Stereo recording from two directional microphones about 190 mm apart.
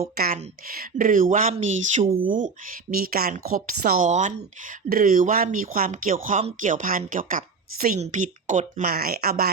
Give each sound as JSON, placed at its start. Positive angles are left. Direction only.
{"t": 0.7, "sound": "speech", "side_deg": -50}
{"t": 2.1, "sound": "speech", "side_deg": -45}